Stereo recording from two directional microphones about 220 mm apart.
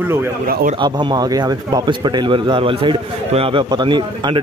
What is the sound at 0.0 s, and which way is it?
Speech, 10° right (ahead or behind).